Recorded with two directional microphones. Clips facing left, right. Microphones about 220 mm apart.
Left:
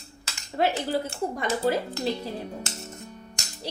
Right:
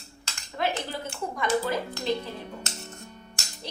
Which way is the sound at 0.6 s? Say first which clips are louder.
Left 5 dB; 35° left (ahead or behind).